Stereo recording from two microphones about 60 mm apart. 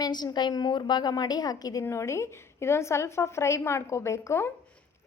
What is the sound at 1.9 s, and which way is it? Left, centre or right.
A woman's voice, left.